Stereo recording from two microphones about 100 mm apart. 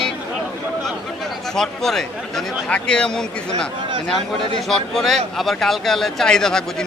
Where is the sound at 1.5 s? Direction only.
5° left (ahead or behind).